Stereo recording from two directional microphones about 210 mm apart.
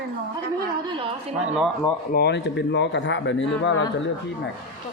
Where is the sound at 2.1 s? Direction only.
55° left (ahead or behind).